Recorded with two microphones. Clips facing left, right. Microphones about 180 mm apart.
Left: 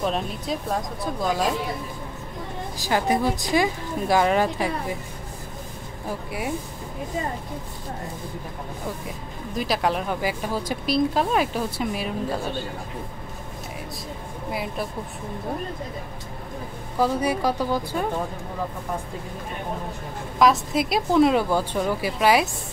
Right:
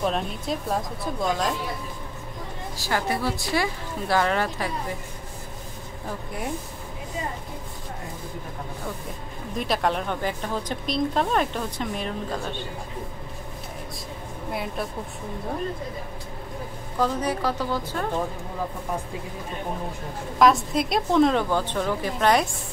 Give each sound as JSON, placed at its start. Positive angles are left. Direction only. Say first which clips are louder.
{"t": 0.0, "sound": "a woman's voice", "louder": "even", "side_deg": 0}
{"t": 2.8, "sound": "speech", "louder": "left 4 dB", "side_deg": 15}
{"t": 6.0, "sound": "a woman's voice", "louder": "left 3 dB", "side_deg": 5}
{"t": 9.6, "sound": "speech", "louder": "left 1 dB", "side_deg": 0}
{"t": 14.5, "sound": "a woman's voice", "louder": "left 1 dB", "side_deg": 0}
{"t": 17.0, "sound": "speech", "louder": "left 3 dB", "side_deg": 10}
{"t": 20.3, "sound": "a woman's voice", "louder": "even", "side_deg": 0}